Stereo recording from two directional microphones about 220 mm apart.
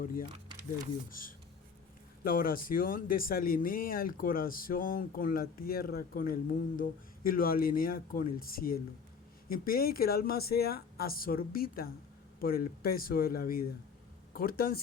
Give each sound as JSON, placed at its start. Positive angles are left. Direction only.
{"t": 0.0, "sound": "speech", "side_deg": 40}
{"t": 2.2, "sound": "speech", "side_deg": 40}